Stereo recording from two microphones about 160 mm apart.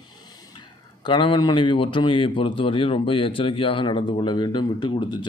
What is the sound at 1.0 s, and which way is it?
Speech, 30° left (ahead or behind).